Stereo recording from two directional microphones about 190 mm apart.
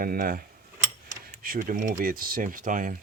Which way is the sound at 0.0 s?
50° right (ahead or behind).